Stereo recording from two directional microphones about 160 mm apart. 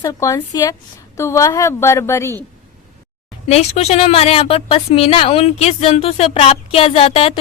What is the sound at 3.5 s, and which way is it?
A woman's voice, 40° left (ahead or behind).